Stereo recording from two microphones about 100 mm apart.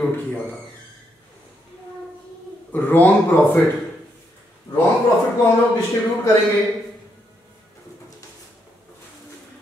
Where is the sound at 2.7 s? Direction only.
20° left (ahead or behind).